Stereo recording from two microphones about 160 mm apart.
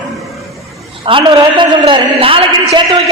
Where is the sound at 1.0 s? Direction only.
30° right (ahead or behind).